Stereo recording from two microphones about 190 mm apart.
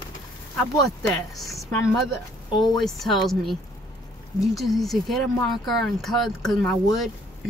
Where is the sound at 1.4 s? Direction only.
15° left (ahead or behind).